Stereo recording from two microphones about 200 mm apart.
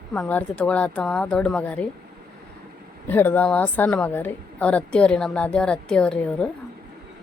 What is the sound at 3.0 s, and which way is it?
A woman's voice, 10° left (ahead or behind).